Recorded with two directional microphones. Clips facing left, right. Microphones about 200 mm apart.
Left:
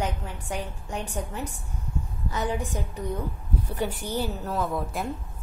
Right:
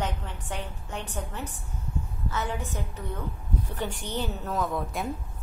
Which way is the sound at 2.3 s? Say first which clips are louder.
Left 4 dB; 15° left (ahead or behind).